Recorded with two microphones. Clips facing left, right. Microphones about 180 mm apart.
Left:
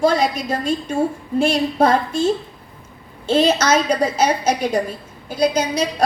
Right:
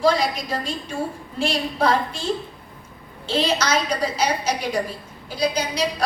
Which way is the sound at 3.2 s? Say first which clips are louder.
Left 6 dB; 50° left (ahead or behind).